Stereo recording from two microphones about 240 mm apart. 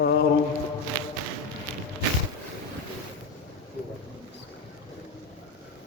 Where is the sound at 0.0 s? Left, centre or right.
Left.